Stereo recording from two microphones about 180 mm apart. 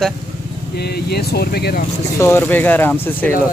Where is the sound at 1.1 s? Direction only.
60° left (ahead or behind).